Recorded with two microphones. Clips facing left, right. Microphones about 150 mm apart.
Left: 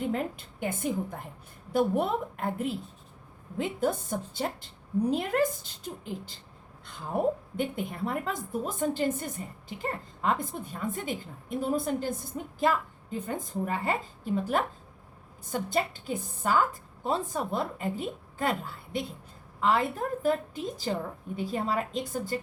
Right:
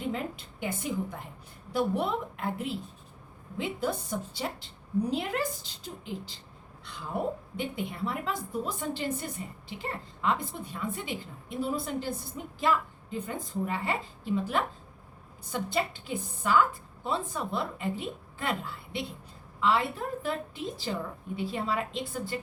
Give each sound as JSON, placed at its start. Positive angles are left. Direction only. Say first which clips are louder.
{"t": 0.6, "sound": "a woman's voice", "louder": "left 2 dB", "side_deg": 50}
{"t": 7.5, "sound": "a woman's voice", "louder": "left 2 dB", "side_deg": 50}